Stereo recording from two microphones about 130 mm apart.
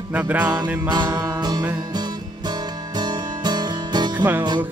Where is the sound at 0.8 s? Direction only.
35° right (ahead or behind).